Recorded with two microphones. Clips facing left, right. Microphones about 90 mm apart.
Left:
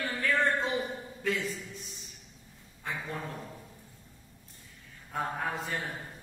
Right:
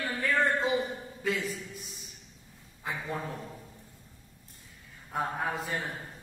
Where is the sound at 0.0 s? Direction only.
5° right (ahead or behind).